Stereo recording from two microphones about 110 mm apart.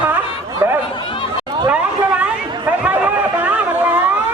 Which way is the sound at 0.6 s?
20° right (ahead or behind).